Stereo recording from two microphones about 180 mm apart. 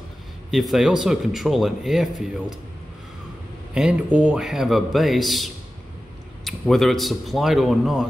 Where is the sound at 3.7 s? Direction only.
5° right (ahead or behind).